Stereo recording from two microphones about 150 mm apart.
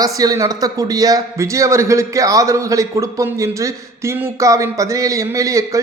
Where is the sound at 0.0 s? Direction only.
25° right (ahead or behind).